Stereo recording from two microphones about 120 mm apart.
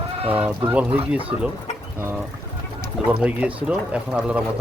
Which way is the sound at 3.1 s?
10° right (ahead or behind).